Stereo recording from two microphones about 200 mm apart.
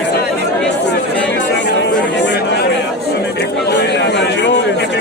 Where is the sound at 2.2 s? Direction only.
60° left (ahead or behind).